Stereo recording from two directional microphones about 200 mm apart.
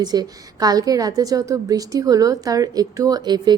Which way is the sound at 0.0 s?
20° right (ahead or behind).